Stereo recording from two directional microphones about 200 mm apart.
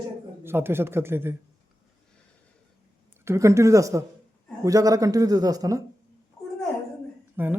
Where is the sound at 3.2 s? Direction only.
15° right (ahead or behind).